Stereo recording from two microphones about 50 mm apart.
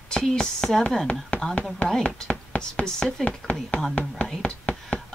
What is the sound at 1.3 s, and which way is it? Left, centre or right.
Chopping, left.